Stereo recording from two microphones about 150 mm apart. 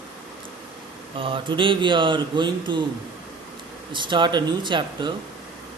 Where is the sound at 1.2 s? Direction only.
35° right (ahead or behind).